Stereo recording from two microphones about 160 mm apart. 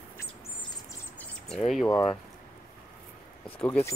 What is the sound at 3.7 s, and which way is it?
Speech, 15° left (ahead or behind).